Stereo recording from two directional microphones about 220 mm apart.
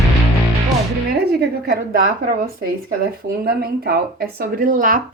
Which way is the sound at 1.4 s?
45° right (ahead or behind).